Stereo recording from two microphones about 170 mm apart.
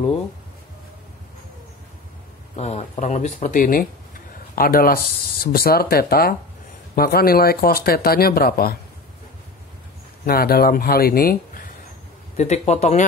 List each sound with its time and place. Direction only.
2.5 s speech: 40° left (ahead or behind); by 8.7 s 60° left (ahead or behind)
10.2 s speech: 65° left (ahead or behind)
12.4 s speech: 40° left (ahead or behind)